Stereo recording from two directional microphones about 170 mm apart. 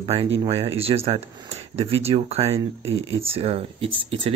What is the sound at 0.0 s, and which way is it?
Speech, 35° right (ahead or behind).